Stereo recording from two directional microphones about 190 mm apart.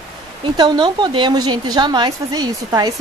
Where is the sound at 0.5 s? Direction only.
25° right (ahead or behind).